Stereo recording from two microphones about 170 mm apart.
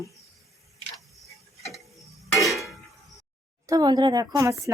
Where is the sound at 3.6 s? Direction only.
20° right (ahead or behind).